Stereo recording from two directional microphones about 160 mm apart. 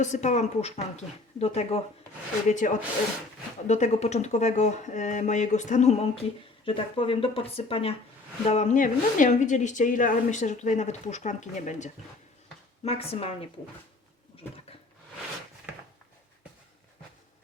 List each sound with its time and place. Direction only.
0.0 s a woman's voice: 45° left (ahead or behind)
2.5 s a woman's voice: 50° left (ahead or behind)
6.7 s a woman's voice: 35° left (ahead or behind); by 11.9 s 50° left (ahead or behind)
12.8 s speech: 40° left (ahead or behind)